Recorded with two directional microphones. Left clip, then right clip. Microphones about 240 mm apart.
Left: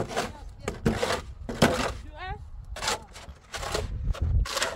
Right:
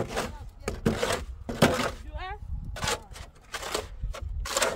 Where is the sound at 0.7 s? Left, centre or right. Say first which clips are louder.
Even; centre.